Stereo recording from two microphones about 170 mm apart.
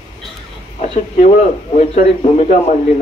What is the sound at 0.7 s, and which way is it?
A man's voice, 40° left (ahead or behind).